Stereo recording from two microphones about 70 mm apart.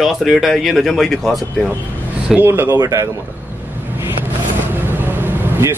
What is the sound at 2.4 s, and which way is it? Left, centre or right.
Speech, right.